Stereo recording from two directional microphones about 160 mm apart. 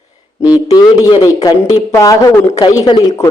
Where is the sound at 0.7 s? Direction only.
20° left (ahead or behind).